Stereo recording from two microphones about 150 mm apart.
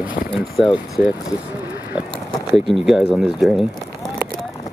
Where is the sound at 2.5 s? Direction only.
Centre (ahead or behind).